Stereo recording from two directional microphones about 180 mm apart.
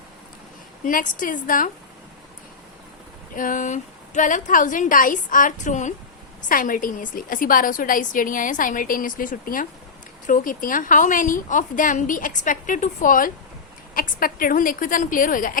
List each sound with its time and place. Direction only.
0.9 s a woman's voice: 50° left (ahead or behind)
3.3 s a woman's voice: 50° left (ahead or behind)